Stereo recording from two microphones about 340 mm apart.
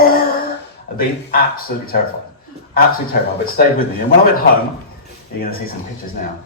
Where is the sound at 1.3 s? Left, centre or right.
Left.